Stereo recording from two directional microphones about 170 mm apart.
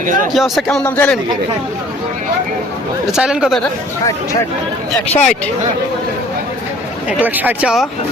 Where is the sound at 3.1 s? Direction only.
5° right (ahead or behind).